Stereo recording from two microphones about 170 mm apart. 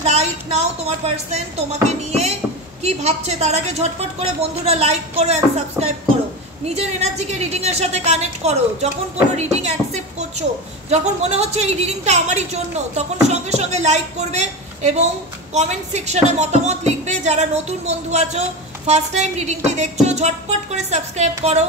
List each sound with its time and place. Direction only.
0.0 s a woman's voice: 40° right (ahead or behind)
9.4 s a sound: 40° right (ahead or behind)
10.9 s a woman's voice: 40° right (ahead or behind)